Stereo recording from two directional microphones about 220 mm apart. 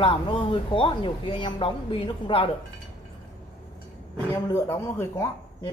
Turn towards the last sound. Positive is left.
turn(degrees=10)  # may be behind; listen again after turning